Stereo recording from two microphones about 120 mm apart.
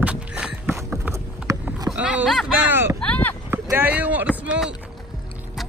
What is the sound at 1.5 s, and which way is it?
Rowboat, 30° right (ahead or behind).